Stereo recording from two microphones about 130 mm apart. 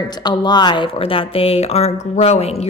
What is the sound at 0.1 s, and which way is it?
A woman's voice, 35° left (ahead or behind).